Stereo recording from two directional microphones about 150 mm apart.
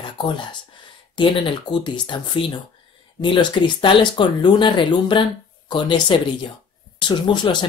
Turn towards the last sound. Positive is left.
turn(degrees=30)  # may be behind; listen again after turning